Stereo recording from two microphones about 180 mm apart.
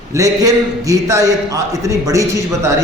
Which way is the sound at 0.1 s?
20° right (ahead or behind).